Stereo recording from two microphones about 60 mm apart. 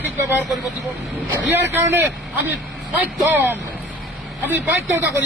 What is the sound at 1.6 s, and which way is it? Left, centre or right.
A man's voice, right.